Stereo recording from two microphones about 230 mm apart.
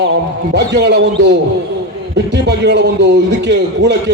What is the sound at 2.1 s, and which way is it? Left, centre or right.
A man's voice, right.